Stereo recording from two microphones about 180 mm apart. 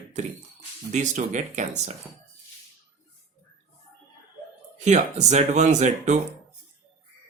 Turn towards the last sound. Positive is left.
turn(degrees=-40)  # may be behind; listen again after turning